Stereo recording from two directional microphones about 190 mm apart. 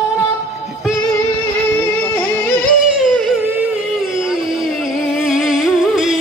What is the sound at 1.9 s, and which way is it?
Music, 5° left (ahead or behind).